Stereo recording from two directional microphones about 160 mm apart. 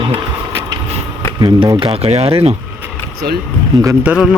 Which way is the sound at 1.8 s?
40° right (ahead or behind).